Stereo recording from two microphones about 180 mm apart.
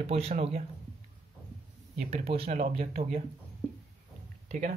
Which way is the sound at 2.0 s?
35° right (ahead or behind).